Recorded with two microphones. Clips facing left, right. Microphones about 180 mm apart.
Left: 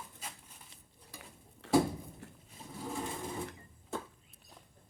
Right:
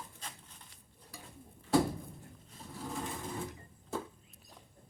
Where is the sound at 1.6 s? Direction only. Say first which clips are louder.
Left 1 dB; 75° left (ahead or behind).